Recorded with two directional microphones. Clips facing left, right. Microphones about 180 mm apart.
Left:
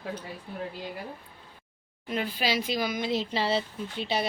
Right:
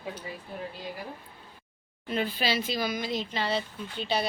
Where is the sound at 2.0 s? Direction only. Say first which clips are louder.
Even; 10° left (ahead or behind).